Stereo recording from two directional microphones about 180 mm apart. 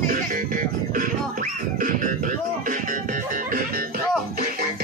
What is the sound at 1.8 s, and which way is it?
Music, 50° right (ahead or behind).